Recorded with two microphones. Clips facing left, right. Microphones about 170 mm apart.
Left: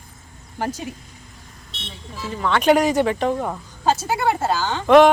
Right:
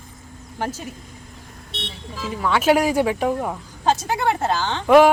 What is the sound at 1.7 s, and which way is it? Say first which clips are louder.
Speech: right 3 dB; 65° right (ahead or behind).